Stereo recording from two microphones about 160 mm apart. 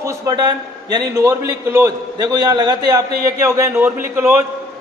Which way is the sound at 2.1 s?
25° right (ahead or behind).